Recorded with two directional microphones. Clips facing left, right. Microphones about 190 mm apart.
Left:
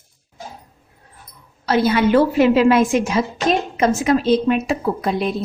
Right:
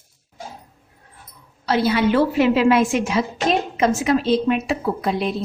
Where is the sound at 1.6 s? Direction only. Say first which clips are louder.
Left 2 dB; 50° left (ahead or behind).